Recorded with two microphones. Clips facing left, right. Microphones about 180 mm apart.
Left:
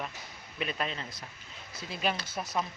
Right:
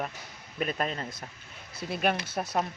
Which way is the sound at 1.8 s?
55° right (ahead or behind).